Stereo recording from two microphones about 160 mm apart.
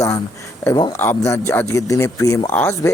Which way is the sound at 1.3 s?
15° left (ahead or behind).